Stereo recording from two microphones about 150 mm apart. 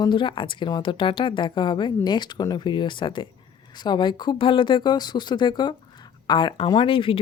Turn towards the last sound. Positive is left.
turn(degrees=35)  # may be behind; listen again after turning